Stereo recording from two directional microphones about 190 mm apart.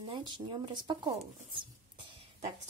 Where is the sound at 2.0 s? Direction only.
30° right (ahead or behind).